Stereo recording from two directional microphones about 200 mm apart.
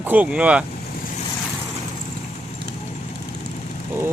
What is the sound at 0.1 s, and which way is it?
Speech, 5° right (ahead or behind).